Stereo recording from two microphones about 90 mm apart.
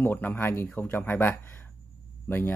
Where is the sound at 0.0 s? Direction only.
20° left (ahead or behind).